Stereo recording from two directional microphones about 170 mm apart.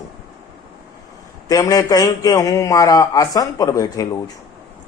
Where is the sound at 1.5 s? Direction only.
20° left (ahead or behind).